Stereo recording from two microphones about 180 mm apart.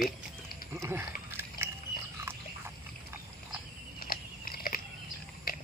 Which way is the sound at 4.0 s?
55° left (ahead or behind).